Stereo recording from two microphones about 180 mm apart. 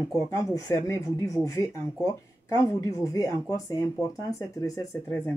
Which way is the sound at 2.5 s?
20° left (ahead or behind).